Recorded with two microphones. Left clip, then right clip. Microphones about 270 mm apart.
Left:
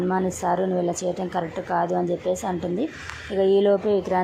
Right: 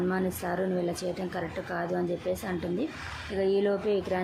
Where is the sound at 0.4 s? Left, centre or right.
Centre.